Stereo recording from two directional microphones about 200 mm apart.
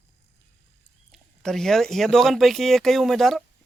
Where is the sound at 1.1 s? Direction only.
Centre (ahead or behind).